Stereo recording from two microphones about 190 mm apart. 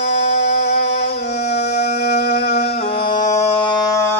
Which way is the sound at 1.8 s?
60° left (ahead or behind).